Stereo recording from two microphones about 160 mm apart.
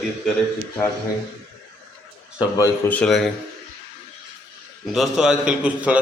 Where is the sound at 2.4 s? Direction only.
20° left (ahead or behind).